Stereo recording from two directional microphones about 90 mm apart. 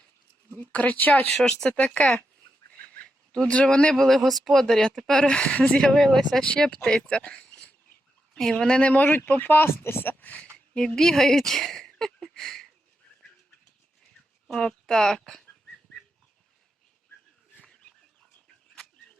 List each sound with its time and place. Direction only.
0.5 s speech: 15° left (ahead or behind)
1.4 s speech: 10° left (ahead or behind)
2.7 s a sound: 15° left (ahead or behind)
3.3 s speech: 10° left (ahead or behind)
7.3 s a sound: 10° left (ahead or behind)
8.4 s speech: 5° left (ahead or behind)
10.8 s speech: 5° left (ahead or behind)
14.0 s a sound: 5° left (ahead or behind)
18.4 s chicken: 5° left (ahead or behind)